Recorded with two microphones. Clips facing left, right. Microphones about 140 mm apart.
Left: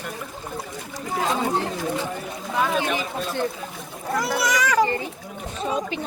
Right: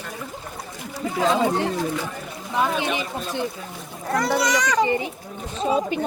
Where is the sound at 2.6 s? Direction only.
20° right (ahead or behind).